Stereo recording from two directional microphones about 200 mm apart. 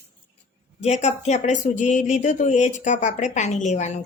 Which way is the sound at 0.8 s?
35° left (ahead or behind).